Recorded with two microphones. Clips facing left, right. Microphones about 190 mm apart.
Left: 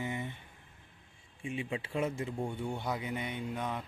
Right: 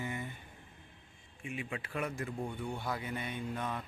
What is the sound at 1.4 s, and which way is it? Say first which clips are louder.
A man's voice: left 4 dB; 30° left (ahead or behind).